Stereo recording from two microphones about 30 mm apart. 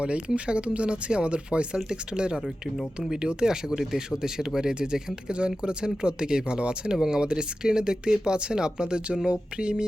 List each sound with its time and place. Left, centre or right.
0.3 s speech: right
1.7 s speech: right
2.4 s speech: centre
3.2 s speech: right
3.5 s speech: centre
5.3 s speech: right
6.9 s speech: right